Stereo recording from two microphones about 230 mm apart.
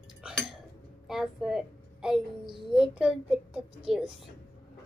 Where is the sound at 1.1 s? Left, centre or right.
Centre.